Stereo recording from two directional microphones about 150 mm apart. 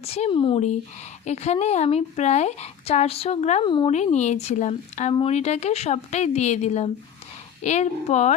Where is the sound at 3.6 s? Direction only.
30° left (ahead or behind).